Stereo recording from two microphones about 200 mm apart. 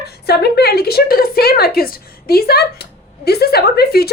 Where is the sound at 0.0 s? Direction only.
55° left (ahead or behind).